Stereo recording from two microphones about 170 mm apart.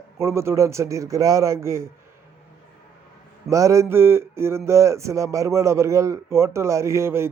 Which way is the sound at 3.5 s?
20° right (ahead or behind).